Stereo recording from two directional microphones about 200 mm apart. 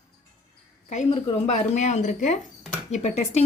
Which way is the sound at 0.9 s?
30° left (ahead or behind).